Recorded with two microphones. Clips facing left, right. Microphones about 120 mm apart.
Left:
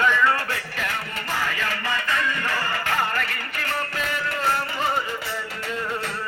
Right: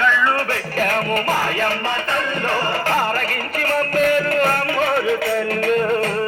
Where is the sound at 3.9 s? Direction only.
60° right (ahead or behind).